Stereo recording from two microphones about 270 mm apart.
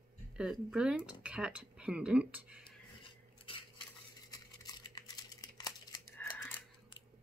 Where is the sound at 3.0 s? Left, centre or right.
Centre.